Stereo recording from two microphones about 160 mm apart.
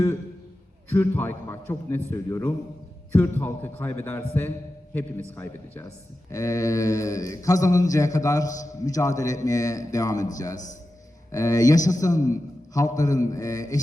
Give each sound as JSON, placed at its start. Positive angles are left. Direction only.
{"t": 0.9, "sound": "a man's voice", "side_deg": 15}